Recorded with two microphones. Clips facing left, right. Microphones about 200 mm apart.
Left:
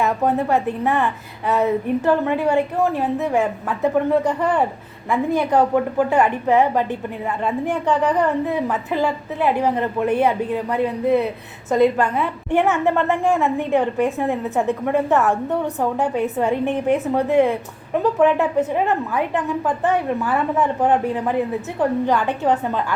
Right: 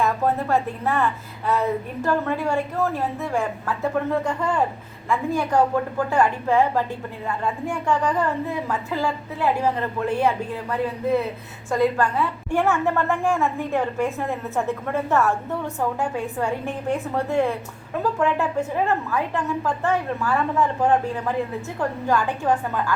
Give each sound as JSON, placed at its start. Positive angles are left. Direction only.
{"t": 0.0, "sound": "a woman's voice", "side_deg": 20}